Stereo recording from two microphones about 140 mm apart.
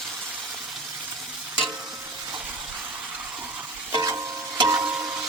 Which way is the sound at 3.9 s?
25° right (ahead or behind).